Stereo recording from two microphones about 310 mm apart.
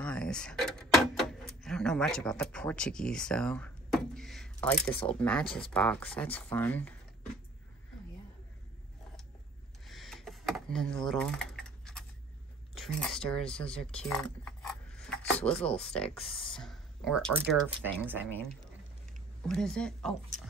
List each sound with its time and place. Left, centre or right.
0.0 s speech: centre
9.8 s typing: centre
12.7 s speech: centre
16.2 s speech: centre
16.5 s speech: centre
19.4 s a woman's voice: centre